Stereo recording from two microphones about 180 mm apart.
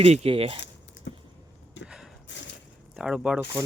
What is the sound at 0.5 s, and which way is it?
Typing, 75° left (ahead or behind).